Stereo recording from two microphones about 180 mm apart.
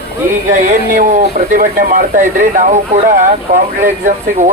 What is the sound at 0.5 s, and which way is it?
A man's voice, 45° right (ahead or behind).